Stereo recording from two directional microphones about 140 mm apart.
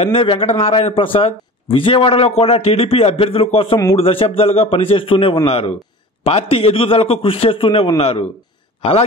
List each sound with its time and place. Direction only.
0.0 s a man's voice: 40° left (ahead or behind)